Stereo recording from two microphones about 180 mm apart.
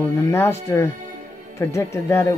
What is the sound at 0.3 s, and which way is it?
Speech, 15° left (ahead or behind).